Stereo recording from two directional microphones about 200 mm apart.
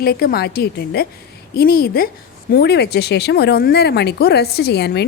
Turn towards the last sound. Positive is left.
turn(degrees=55)  # may be behind; listen again after turning